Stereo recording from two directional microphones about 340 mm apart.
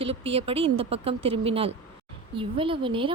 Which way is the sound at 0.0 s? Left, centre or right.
Centre.